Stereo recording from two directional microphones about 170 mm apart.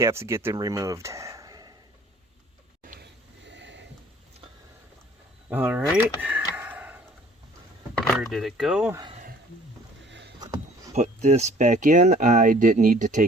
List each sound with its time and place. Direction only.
0.0 s speech: 15° right (ahead or behind)
2.8 s a sound: 65° right (ahead or behind); by 3.8 s 90° right
5.5 s a sound: 10° right (ahead or behind)
7.9 s speech: centre (ahead or behind)
10.1 s rowboat: 90° right
10.9 s speech: 40° right (ahead or behind)